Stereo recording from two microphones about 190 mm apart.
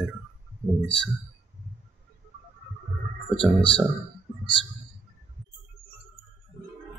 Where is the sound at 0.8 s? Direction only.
65° left (ahead or behind).